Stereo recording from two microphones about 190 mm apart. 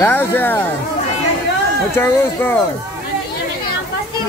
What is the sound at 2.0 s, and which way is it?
Speech, 10° left (ahead or behind).